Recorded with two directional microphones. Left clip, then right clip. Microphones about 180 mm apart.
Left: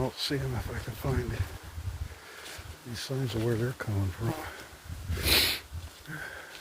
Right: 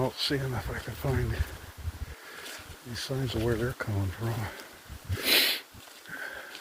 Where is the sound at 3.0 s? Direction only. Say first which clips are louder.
Right 1 dB; 25° left (ahead or behind).